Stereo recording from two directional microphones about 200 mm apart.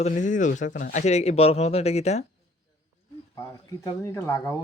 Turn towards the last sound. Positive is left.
turn(degrees=15)  # may be behind; listen again after turning